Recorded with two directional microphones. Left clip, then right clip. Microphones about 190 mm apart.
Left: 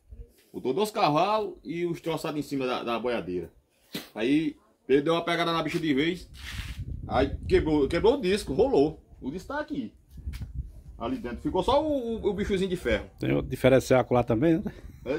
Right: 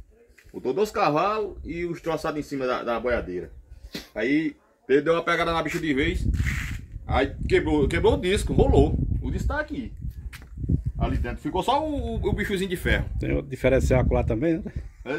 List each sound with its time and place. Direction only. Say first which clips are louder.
0.6 s speech: right 2 dB; 25° left (ahead or behind)
3.9 s a sound: right 2 dB; 25° left (ahead or behind)
4.8 s a man's voice: right 3 dB; 10° left (ahead or behind); by 6.1 s 10° right (ahead or behind)
7.1 s a man's voice: right 2 dB; 25° right (ahead or behind)
11.0 s speech: even; 45° right (ahead or behind)
13.2 s speech: even; 10° left (ahead or behind)